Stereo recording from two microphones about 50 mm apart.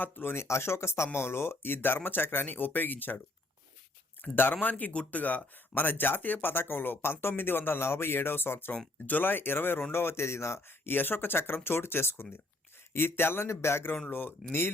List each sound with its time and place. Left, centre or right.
0.0 s speech: left
0.3 s speech: left
4.2 s speech: left
10.8 s speech: left
14.1 s speech: left